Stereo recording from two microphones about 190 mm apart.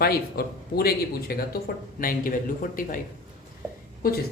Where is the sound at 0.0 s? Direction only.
55° left (ahead or behind).